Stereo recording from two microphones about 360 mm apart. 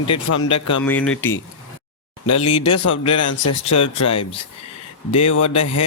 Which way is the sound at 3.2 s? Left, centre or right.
Left.